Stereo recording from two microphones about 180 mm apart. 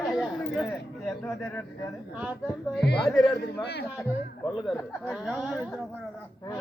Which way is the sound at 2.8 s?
65° left (ahead or behind).